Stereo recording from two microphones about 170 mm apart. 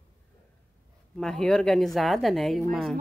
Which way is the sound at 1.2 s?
5° left (ahead or behind).